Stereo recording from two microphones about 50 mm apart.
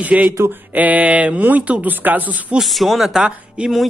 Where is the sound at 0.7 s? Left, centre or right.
Right.